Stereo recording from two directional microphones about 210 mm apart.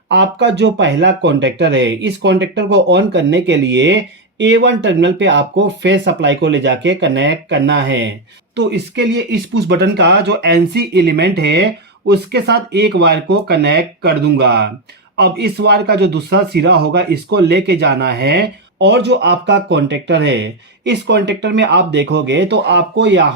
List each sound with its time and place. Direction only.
0.1 s speech: 55° right (ahead or behind)